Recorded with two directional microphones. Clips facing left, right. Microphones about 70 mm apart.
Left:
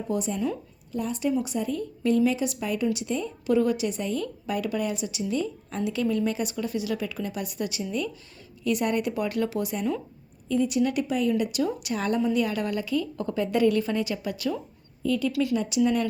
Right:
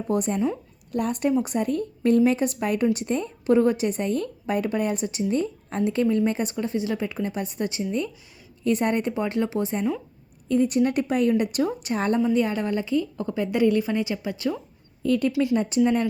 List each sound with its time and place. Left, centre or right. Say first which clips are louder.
0.1 s a woman's voice: right 4 dB; right
1.3 s a woman's voice: right 2 dB; right
10.5 s a woman's voice: right 3 dB; right
15.0 s speech: right 3 dB; right
15.3 s a woman's voice: right 3 dB; right